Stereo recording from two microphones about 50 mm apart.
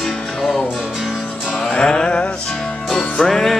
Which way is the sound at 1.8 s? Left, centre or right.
Centre.